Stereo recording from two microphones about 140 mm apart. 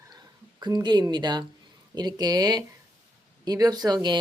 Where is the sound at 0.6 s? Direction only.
30° right (ahead or behind).